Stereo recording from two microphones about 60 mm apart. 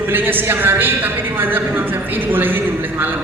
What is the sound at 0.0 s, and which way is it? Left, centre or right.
A woman's voice, right.